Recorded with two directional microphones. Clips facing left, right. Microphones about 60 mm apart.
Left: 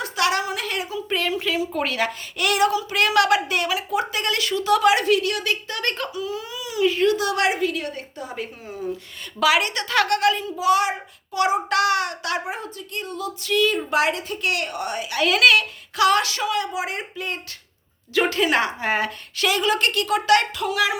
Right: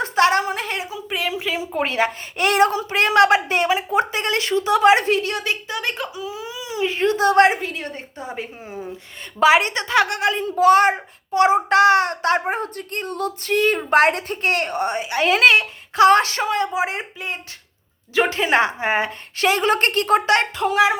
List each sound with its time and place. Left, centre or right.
0.0 s a sound: right
0.9 s a woman's voice: centre
10.4 s a child's voice: right